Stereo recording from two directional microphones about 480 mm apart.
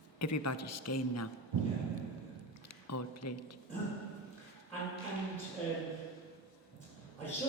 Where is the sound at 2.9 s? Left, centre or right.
Left.